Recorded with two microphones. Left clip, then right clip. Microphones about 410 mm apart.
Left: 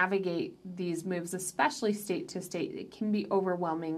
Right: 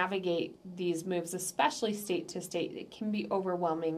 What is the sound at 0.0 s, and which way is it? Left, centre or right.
A woman's voice, centre.